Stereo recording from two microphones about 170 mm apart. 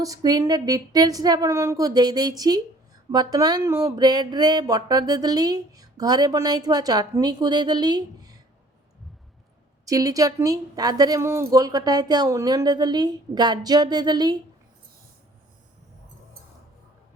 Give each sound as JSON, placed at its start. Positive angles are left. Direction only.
{"t": 0.0, "sound": "speech", "side_deg": -20}
{"t": 9.8, "sound": "speech", "side_deg": -20}